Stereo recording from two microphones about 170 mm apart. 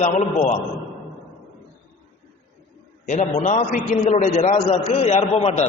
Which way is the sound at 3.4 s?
45° left (ahead or behind).